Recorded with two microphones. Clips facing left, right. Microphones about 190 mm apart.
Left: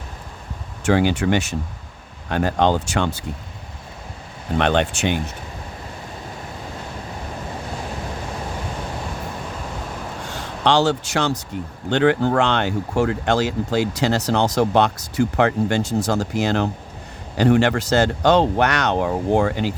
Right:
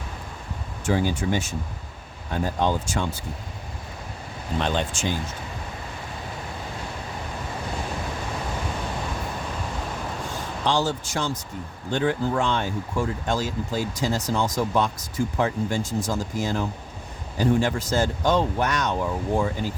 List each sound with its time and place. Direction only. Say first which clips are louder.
0.9 s speech: left 6 dB; 75° left (ahead or behind)
4.5 s speech: left 7 dB; 65° left (ahead or behind)
10.3 s speech: left 6 dB; 75° left (ahead or behind)